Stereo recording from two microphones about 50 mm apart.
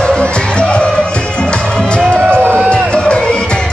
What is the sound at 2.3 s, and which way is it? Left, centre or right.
Music, right.